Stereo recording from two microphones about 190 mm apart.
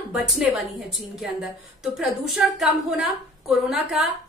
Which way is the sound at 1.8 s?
Centre (ahead or behind).